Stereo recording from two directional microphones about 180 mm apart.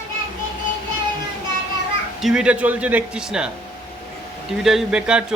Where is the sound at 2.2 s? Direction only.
5° right (ahead or behind).